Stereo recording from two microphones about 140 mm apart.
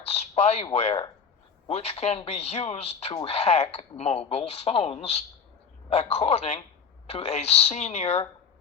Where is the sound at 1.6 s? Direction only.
50° left (ahead or behind).